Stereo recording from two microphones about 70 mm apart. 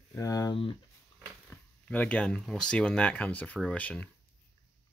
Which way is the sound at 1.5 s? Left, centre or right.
Centre.